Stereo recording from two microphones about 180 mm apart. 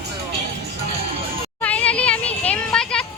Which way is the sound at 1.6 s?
10° left (ahead or behind).